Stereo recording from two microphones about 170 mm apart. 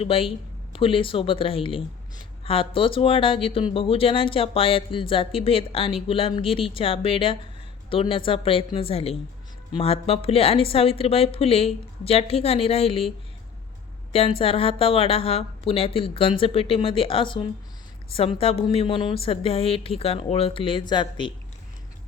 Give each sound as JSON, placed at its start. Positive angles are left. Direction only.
{"t": 0.0, "sound": "speech", "side_deg": 30}
{"t": 14.1, "sound": "speech", "side_deg": 35}